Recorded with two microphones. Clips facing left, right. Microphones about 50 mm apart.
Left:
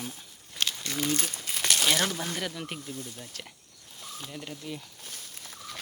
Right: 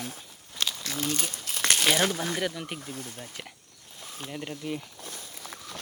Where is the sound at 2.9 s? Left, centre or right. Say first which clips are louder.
Right 1 dB; right.